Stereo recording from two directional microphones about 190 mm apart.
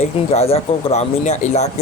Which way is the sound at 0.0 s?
35° left (ahead or behind).